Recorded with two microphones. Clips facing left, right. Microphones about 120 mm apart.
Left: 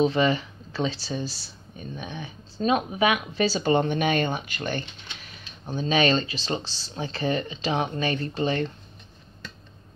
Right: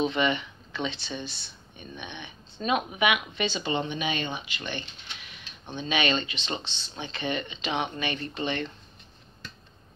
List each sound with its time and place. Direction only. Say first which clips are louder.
0.0 s speech: left 4 dB; 30° left (ahead or behind)